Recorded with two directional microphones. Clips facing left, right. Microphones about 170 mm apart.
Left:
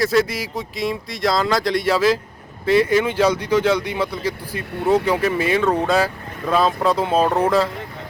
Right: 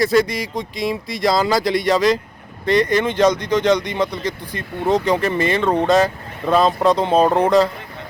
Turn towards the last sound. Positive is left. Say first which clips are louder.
# right 3 dB
turn(degrees=5)  # may be behind; listen again after turning